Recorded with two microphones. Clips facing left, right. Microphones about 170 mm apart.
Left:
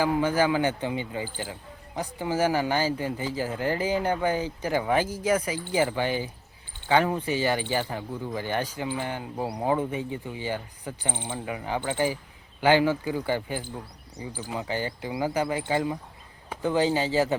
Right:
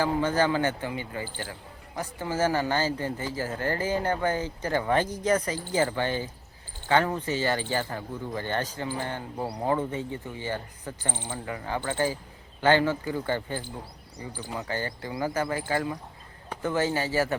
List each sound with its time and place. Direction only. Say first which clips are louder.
0.0 s speech: left 1 dB; 10° left (ahead or behind)